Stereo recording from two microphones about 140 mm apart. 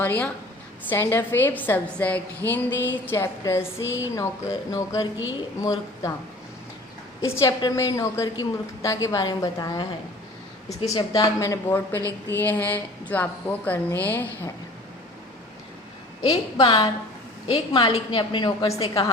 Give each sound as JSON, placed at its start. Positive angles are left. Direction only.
{"t": 0.0, "sound": "a woman's voice", "side_deg": 15}
{"t": 7.3, "sound": "a woman's voice", "side_deg": 20}
{"t": 10.8, "sound": "a woman's voice", "side_deg": 25}
{"t": 16.2, "sound": "a woman's voice", "side_deg": 40}